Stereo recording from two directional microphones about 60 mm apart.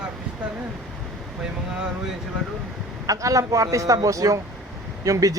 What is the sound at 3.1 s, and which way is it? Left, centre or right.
A man's voice, right.